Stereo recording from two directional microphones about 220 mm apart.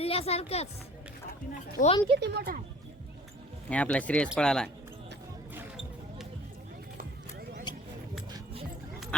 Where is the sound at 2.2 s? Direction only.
45° right (ahead or behind).